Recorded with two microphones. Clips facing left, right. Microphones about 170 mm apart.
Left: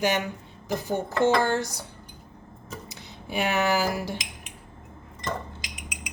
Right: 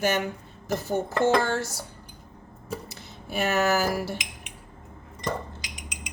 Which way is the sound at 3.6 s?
45° right (ahead or behind).